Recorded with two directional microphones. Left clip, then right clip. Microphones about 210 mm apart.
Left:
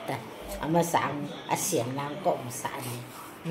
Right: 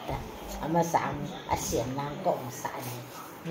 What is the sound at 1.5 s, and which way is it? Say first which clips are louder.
Speech: left 1 dB; 30° left (ahead or behind).